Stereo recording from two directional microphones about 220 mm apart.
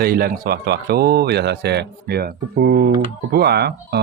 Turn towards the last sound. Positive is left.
turn(degrees=-50)  # may be behind; listen again after turning